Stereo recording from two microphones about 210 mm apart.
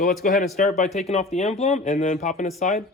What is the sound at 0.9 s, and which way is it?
Speech, 30° left (ahead or behind).